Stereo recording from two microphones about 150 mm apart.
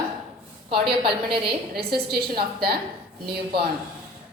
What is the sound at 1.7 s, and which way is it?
A woman's voice, 90° right.